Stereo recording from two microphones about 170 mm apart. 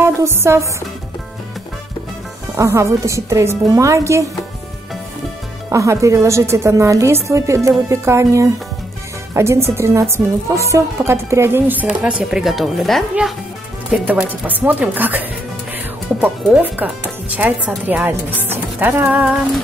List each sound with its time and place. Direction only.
0.4 s speech: 15° right (ahead or behind)
2.5 s speech: 15° right (ahead or behind)
5.7 s speech: 15° right (ahead or behind)